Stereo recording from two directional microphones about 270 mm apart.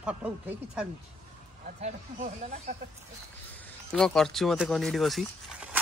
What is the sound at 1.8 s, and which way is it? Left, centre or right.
Speech, right.